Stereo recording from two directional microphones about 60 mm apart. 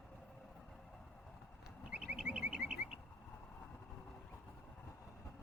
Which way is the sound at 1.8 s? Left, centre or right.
Centre.